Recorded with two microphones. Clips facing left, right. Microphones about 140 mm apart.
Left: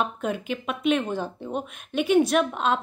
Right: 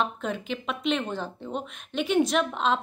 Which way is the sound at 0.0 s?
5° left (ahead or behind).